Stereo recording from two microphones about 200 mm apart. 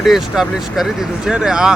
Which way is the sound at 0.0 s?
Centre (ahead or behind).